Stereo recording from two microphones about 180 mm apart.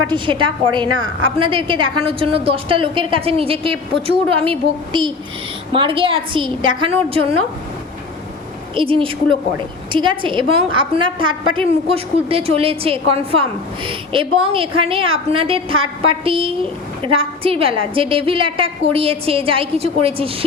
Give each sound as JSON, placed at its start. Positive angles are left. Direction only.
{"t": 0.1, "sound": "a woman's voice", "side_deg": -25}
{"t": 8.7, "sound": "a woman's voice", "side_deg": -30}